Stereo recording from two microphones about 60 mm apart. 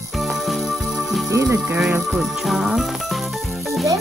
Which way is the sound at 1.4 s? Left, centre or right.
Right.